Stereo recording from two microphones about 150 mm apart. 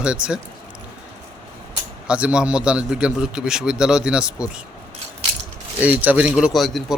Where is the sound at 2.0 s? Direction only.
5° right (ahead or behind).